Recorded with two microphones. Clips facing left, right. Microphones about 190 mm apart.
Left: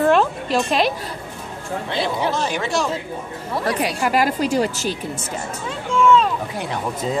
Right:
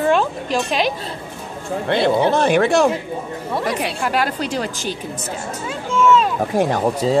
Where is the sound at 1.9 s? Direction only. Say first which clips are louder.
Right 7 dB; 60° right (ahead or behind).